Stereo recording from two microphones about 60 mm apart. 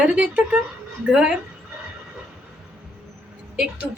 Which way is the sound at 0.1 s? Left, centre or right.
Right.